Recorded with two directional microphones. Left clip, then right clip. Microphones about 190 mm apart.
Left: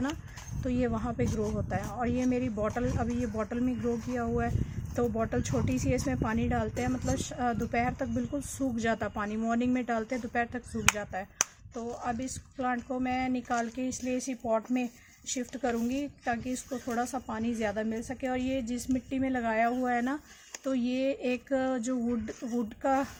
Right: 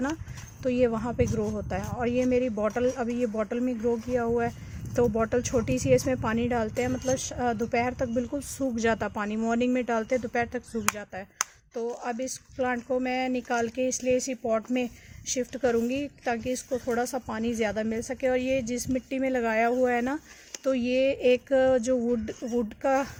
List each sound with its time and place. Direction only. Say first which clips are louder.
0.6 s speech: right 7 dB; 40° right (ahead or behind)